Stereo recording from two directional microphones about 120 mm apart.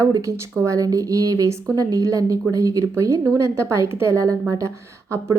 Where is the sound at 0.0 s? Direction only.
30° right (ahead or behind).